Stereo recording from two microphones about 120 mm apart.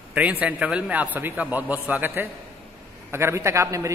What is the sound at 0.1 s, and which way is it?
A man's voice, 10° right (ahead or behind).